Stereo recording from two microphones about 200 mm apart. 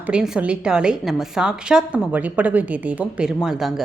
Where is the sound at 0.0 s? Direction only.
5° right (ahead or behind).